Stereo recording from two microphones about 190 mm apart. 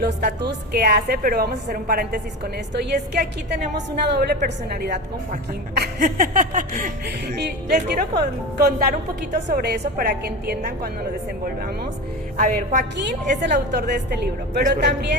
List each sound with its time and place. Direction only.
0.0 s a woman's voice: 60° right (ahead or behind); by 6.9 s 40° right (ahead or behind)
7.4 s a woman's voice: 55° right (ahead or behind)
12.4 s a woman's voice: 45° right (ahead or behind)
13.0 s a woman's voice: 65° right (ahead or behind)